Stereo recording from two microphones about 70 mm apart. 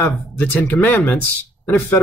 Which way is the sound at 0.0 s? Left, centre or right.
Left.